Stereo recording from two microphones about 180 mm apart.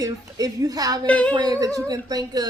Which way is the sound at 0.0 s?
20° right (ahead or behind).